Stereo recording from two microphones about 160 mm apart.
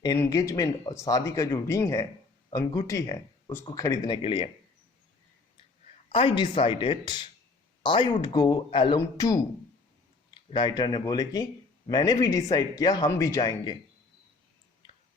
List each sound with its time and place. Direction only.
0.2 s speech: 20° left (ahead or behind)
6.1 s speech: 35° left (ahead or behind)